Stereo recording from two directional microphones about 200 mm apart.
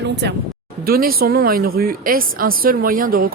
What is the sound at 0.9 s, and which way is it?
Speech, 50° right (ahead or behind).